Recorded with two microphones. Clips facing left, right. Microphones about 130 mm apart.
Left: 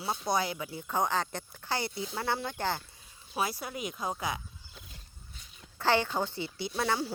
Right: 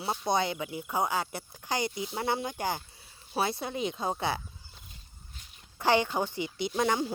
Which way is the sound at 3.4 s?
25° right (ahead or behind).